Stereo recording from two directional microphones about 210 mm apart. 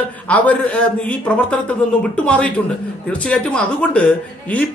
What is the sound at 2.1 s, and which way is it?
A man's voice, 5° left (ahead or behind).